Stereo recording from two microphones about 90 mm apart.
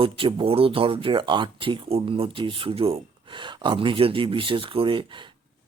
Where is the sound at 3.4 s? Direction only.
65° right (ahead or behind).